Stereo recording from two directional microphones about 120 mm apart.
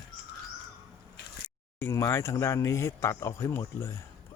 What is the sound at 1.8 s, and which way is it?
Speech, 20° left (ahead or behind).